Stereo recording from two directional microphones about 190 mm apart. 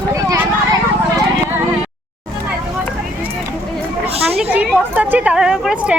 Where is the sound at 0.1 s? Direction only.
15° right (ahead or behind).